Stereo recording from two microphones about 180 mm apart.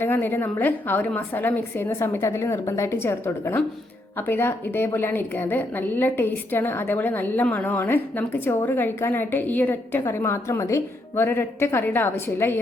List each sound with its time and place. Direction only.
0.0 s a woman's voice: 10° left (ahead or behind)